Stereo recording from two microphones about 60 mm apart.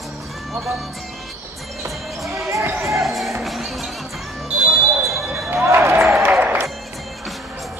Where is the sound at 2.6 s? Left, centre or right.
Right.